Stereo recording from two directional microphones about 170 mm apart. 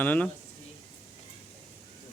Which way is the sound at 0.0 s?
10° left (ahead or behind).